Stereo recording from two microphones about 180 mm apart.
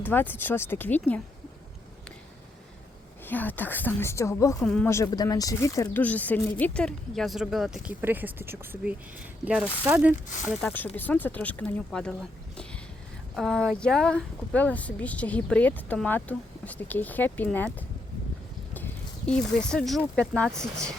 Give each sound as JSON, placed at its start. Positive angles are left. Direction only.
{"t": 0.0, "sound": "speech", "side_deg": 10}
{"t": 3.2, "sound": "speech", "side_deg": 10}
{"t": 4.6, "sound": "speech", "side_deg": 5}
{"t": 4.9, "sound": "speech", "side_deg": 20}
{"t": 10.6, "sound": "speech", "side_deg": 10}
{"t": 13.3, "sound": "speech", "side_deg": 5}
{"t": 18.7, "sound": "a sound", "side_deg": 10}
{"t": 20.1, "sound": "speech", "side_deg": 5}